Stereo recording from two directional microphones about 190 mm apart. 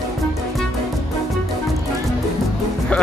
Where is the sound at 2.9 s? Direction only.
5° left (ahead or behind).